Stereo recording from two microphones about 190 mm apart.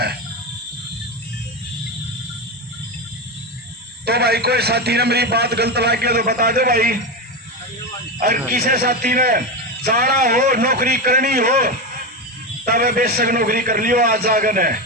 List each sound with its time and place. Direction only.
4.0 s a man's voice: 55° right (ahead or behind)
8.2 s a man's voice: 50° right (ahead or behind)